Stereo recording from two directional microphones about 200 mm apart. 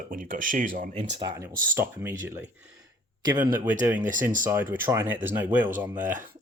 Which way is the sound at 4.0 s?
40° right (ahead or behind).